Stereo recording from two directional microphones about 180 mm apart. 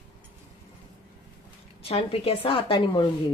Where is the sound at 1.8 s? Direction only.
30° left (ahead or behind).